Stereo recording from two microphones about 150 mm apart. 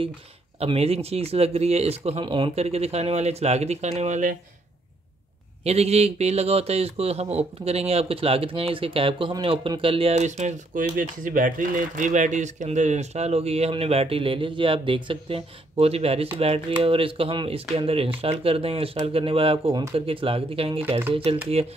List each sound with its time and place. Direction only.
0.6 s speech: 40° right (ahead or behind)
5.6 s speech: 45° right (ahead or behind)